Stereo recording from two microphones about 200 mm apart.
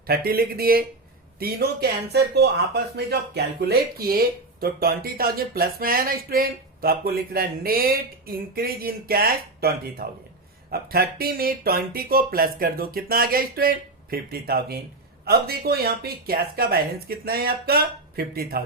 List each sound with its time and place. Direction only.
0.1 s speech: 50° right (ahead or behind)